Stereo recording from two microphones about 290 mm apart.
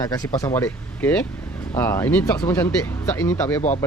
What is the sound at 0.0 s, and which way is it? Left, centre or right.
Speech, centre.